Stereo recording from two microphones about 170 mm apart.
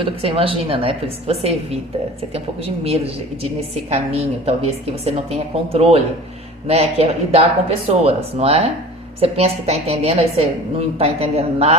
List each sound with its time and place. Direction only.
0.0 s a woman's voice: 35° right (ahead or behind)